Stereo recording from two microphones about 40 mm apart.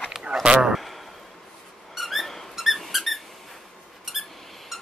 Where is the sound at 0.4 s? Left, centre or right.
Right.